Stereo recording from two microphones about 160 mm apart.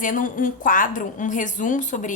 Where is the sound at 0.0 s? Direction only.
55° left (ahead or behind).